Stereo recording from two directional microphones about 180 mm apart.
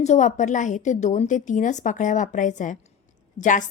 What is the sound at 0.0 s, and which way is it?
A woman's voice, 40° left (ahead or behind).